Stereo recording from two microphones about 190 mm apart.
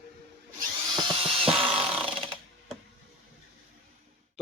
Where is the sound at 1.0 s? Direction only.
30° right (ahead or behind).